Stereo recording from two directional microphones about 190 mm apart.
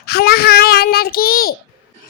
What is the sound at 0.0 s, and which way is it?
Child singing, 55° left (ahead or behind).